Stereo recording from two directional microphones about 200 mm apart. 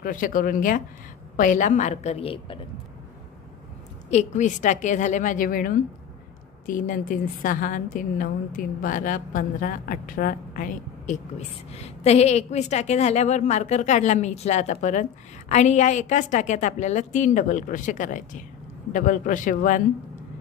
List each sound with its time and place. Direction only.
0.0 s a woman's voice: 45° left (ahead or behind); by 2.6 s 25° left (ahead or behind)
4.1 s a woman's voice: 35° left (ahead or behind)